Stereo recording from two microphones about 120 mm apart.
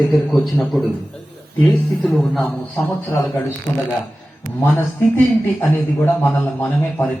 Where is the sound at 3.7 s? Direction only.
15° left (ahead or behind).